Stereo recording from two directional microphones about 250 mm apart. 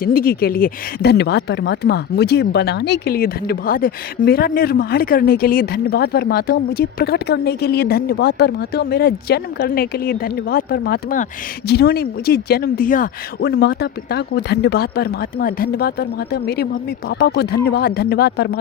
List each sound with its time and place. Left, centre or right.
0.0 s speech: left